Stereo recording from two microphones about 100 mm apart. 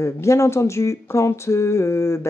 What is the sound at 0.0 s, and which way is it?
Speech, 30° left (ahead or behind).